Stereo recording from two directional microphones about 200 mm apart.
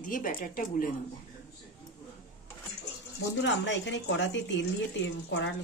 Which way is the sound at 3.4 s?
65° left (ahead or behind).